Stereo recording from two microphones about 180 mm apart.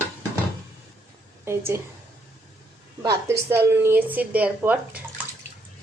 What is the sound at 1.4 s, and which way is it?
Speech, 15° right (ahead or behind).